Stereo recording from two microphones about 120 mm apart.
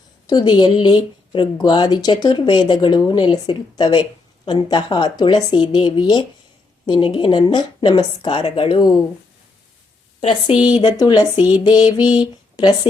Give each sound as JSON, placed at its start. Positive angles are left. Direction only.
{"t": 0.3, "sound": "speech", "side_deg": 35}
{"t": 10.2, "sound": "a woman's voice", "side_deg": 55}
{"t": 10.5, "sound": "a sound", "side_deg": -10}
{"t": 10.8, "sound": "speech", "side_deg": 35}
{"t": 11.3, "sound": "a sound", "side_deg": -15}
{"t": 11.6, "sound": "speech", "side_deg": 35}